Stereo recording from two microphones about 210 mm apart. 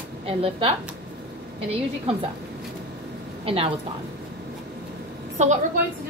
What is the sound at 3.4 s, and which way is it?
Speech, 25° right (ahead or behind).